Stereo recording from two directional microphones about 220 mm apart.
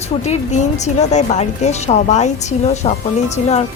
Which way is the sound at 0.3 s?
30° left (ahead or behind).